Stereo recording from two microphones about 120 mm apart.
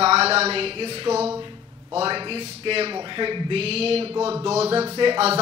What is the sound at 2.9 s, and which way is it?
A man's voice, 40° right (ahead or behind).